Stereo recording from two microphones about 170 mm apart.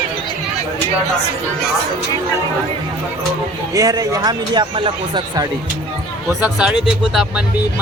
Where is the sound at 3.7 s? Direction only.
20° right (ahead or behind).